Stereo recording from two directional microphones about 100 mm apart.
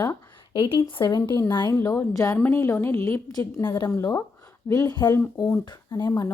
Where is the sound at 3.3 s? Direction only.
40° left (ahead or behind).